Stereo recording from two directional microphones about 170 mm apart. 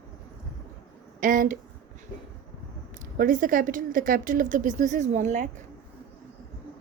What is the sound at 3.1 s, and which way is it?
A woman's voice, 55° right (ahead or behind).